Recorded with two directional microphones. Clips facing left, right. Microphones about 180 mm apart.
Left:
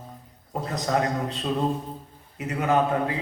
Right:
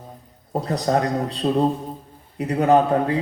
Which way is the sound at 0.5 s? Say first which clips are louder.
Right 5 dB; 35° right (ahead or behind).